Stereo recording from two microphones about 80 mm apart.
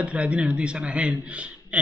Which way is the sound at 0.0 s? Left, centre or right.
Centre.